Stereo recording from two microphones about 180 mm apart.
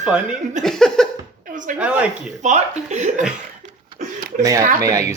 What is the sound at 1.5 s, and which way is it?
Speech, 45° right (ahead or behind).